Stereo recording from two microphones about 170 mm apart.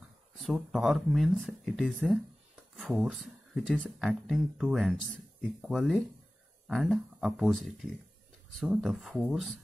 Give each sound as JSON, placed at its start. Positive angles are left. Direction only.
{"t": 0.4, "sound": "speech", "side_deg": 0}